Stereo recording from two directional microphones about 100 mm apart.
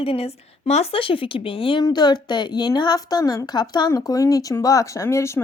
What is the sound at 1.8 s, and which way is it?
A woman's voice, 45° left (ahead or behind).